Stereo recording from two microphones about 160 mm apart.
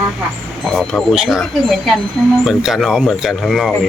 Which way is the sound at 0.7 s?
5° left (ahead or behind).